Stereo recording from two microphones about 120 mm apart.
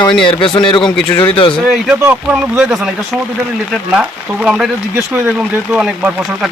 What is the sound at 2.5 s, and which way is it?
Speech, centre (ahead or behind).